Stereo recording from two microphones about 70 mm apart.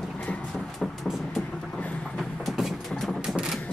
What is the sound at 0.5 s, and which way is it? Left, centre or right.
Vehicle, centre.